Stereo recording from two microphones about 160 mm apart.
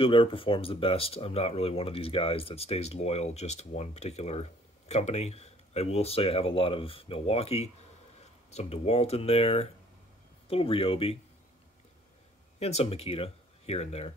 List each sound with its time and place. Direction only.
0.0 s speech: 35° left (ahead or behind)
12.5 s speech: 40° left (ahead or behind)